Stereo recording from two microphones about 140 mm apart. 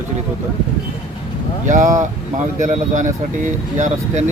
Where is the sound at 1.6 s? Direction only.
65° right (ahead or behind).